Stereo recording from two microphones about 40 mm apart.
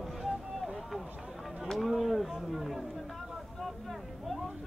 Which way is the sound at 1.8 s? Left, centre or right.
Centre.